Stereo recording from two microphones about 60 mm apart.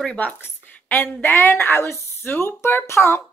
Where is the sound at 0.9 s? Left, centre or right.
Left.